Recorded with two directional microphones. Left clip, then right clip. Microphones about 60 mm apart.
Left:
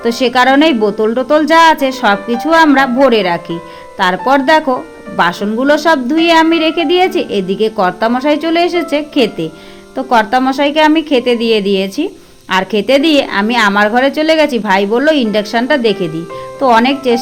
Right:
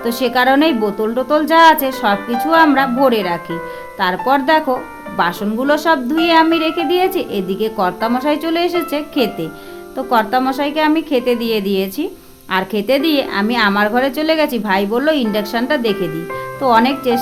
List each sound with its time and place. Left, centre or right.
0.0 s a woman's voice: left